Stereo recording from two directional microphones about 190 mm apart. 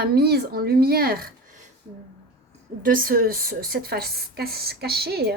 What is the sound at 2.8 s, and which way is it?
A woman's voice, 50° right (ahead or behind).